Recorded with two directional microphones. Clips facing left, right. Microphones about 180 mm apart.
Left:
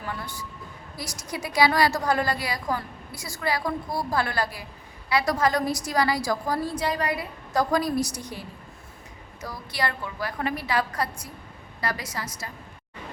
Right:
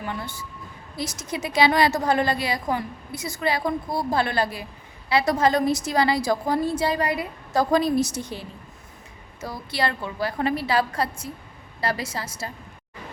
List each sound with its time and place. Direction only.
0.9 s a woman's voice: 25° right (ahead or behind)